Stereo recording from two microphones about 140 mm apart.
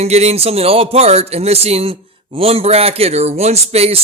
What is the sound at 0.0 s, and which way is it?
A man's voice, 50° right (ahead or behind).